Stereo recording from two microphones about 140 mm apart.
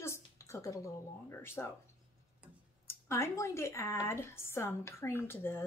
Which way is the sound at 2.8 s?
20° left (ahead or behind).